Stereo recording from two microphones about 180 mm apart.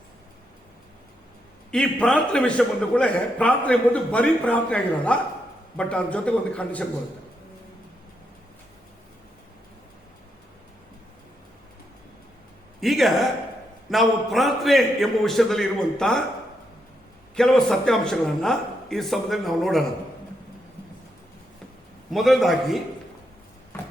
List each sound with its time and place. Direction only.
1.7 s a man's voice: 5° left (ahead or behind)
12.8 s speech: centre (ahead or behind)
17.3 s speech: 5° left (ahead or behind)
22.1 s speech: centre (ahead or behind)